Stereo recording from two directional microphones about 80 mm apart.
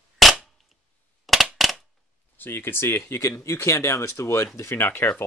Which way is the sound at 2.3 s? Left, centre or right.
Left.